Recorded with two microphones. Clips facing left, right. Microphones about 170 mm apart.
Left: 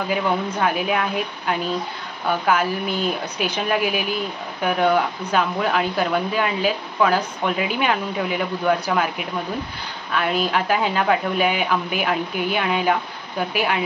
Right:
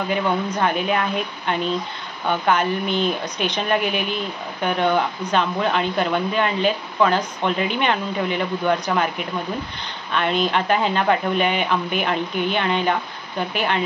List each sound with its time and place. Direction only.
0.1 s speech: 5° left (ahead or behind)
10.1 s speech: 5° left (ahead or behind)